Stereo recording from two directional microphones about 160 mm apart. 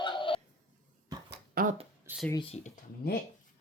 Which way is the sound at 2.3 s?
35° left (ahead or behind).